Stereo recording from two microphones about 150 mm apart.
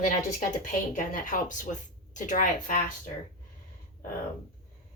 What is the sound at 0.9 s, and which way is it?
Speech, 65° left (ahead or behind).